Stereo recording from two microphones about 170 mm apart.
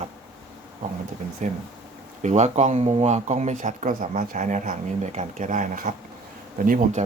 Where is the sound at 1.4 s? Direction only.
45° right (ahead or behind).